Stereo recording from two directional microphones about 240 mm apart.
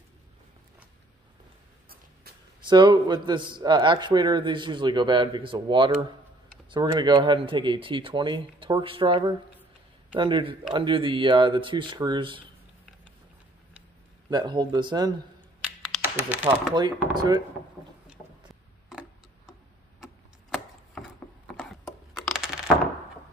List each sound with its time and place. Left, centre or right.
2.6 s speech: centre
14.3 s speech: centre
15.6 s computer keyboard: centre
16.7 s speech: centre
18.0 s tick-tock: centre
21.0 s gears: centre
21.5 s a sound: centre